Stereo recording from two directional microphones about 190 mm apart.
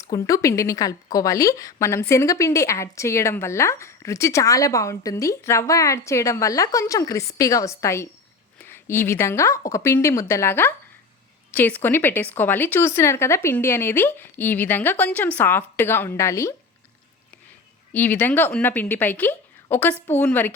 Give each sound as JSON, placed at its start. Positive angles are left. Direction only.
{"t": 0.0, "sound": "a woman's voice", "side_deg": 15}
{"t": 17.9, "sound": "a woman's voice", "side_deg": 10}